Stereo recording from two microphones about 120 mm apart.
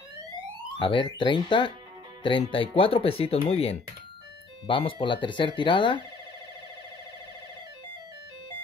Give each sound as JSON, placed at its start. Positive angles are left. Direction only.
{"t": 0.7, "sound": "speech", "side_deg": 40}